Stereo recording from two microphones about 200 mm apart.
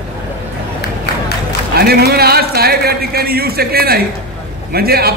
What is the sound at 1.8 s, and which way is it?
A man's voice, 50° right (ahead or behind).